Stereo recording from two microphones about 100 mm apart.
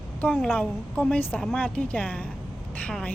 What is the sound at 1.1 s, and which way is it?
Speech, 10° left (ahead or behind).